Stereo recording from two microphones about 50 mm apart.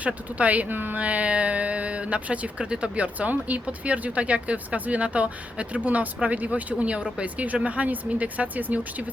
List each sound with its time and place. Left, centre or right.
0.0 s speech: right
1.0 s speech: right